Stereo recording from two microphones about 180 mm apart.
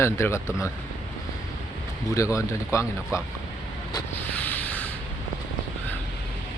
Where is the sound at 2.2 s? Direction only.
15° left (ahead or behind).